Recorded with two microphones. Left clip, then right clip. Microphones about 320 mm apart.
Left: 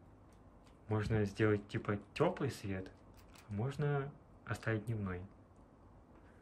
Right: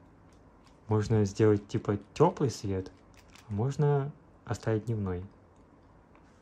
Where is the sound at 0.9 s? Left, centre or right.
Centre.